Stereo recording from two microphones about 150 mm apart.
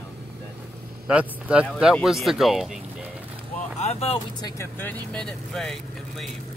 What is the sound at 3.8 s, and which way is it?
Speech, 45° left (ahead or behind).